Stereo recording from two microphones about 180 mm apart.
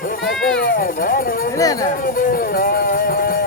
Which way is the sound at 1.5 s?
20° left (ahead or behind).